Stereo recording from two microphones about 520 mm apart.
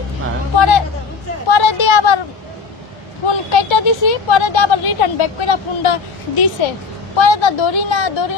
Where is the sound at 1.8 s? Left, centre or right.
Left.